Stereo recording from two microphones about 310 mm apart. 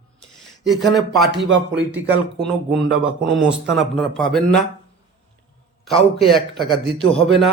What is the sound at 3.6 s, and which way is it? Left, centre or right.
Speech, centre.